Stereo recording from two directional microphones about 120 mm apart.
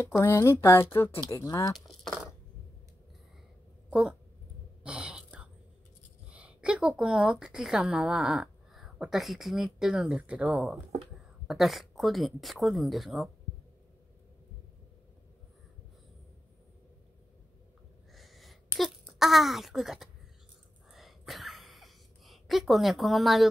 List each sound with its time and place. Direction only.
0.2 s a woman's voice: 25° left (ahead or behind)
3.9 s speech: 5° right (ahead or behind)
4.8 s throat clearing: 10° right (ahead or behind)
6.2 s a woman's voice: 10° right (ahead or behind)
18.1 s a sound: centre (ahead or behind)